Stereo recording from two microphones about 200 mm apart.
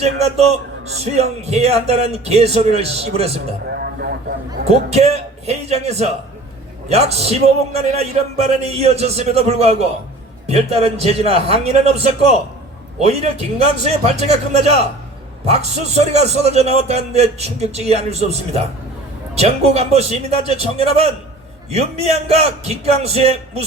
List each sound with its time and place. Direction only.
0.0 s a man's voice: 30° right (ahead or behind)
3.7 s speech: 55° right (ahead or behind)
4.6 s a man's voice: 30° right (ahead or behind)